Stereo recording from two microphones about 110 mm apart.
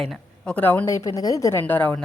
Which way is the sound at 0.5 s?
15° left (ahead or behind).